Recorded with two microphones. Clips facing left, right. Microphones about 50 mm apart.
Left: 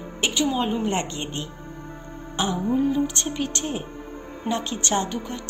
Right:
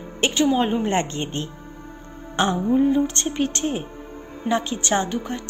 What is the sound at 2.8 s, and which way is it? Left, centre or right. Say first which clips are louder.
Speech: right 3 dB; right.